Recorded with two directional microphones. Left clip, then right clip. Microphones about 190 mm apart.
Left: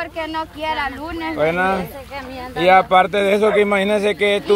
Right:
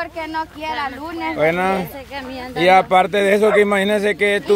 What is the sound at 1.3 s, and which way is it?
Speech, 25° right (ahead or behind).